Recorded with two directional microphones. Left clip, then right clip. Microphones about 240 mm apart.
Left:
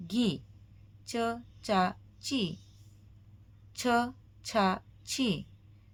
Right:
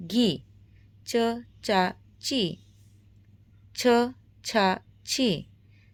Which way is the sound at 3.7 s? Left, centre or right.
Right.